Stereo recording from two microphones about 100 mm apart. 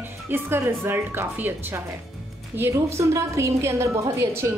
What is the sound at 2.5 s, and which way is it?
A woman's voice, 25° right (ahead or behind).